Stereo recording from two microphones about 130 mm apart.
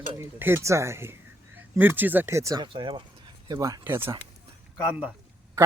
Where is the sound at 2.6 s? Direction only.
40° right (ahead or behind).